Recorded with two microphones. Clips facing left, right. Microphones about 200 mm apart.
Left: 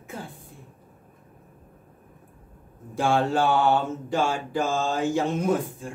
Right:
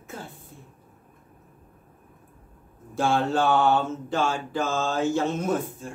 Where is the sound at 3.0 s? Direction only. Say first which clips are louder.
Left 1 dB; 10° left (ahead or behind).